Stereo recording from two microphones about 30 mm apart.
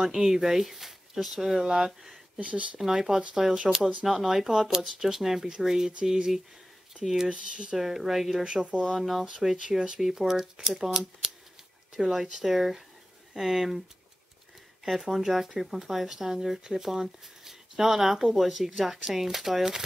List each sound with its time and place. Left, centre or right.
0.0 s speech: centre
2.3 s speech: right
2.8 s speech: centre
4.0 s speech: centre
7.2 s speech: right
7.7 s speech: centre
9.2 s speech: centre
9.9 s speech: centre
12.1 s speech: centre
14.9 s speech: centre